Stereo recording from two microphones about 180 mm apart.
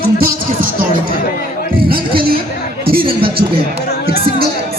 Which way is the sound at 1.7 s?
55° right (ahead or behind).